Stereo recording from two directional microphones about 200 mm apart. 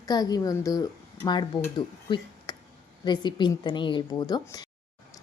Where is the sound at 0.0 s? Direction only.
20° left (ahead or behind).